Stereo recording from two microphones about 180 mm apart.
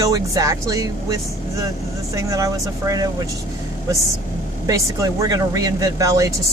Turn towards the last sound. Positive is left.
turn(degrees=-20)  # may be behind; listen again after turning